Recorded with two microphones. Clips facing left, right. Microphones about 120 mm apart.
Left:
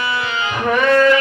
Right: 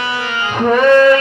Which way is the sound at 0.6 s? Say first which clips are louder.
Right 6 dB; 30° right (ahead or behind).